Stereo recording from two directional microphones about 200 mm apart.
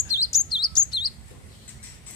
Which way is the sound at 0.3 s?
20° left (ahead or behind).